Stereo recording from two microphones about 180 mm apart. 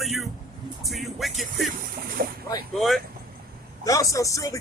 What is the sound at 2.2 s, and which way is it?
Speech, 55° right (ahead or behind).